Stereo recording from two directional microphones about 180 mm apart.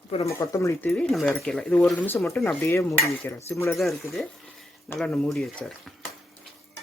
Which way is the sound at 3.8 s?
Centre (ahead or behind).